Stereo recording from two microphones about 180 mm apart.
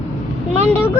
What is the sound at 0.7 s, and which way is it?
Speech, 10° left (ahead or behind).